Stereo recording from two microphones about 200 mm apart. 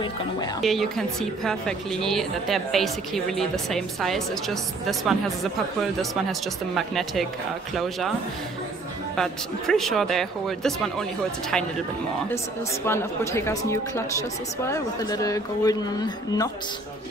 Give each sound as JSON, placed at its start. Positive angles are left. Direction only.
{"t": 0.6, "sound": "a woman's voice", "side_deg": 0}
{"t": 6.7, "sound": "a woman's voice", "side_deg": 0}
{"t": 9.1, "sound": "a woman's voice", "side_deg": 5}
{"t": 12.8, "sound": "a woman's voice", "side_deg": 15}